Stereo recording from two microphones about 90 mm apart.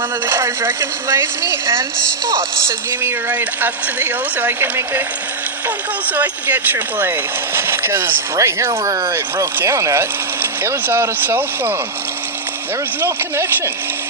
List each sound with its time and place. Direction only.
0.3 s speech: 30° right (ahead or behind)
3.2 s speech: 20° right (ahead or behind)
13.0 s speech: 30° right (ahead or behind)